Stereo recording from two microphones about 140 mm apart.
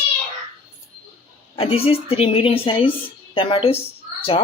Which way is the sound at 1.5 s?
45° left (ahead or behind).